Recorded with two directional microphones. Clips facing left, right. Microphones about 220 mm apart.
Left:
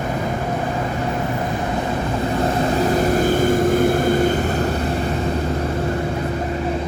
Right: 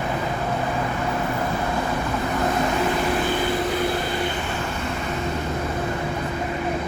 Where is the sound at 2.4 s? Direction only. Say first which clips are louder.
Left 3 dB; 30° left (ahead or behind).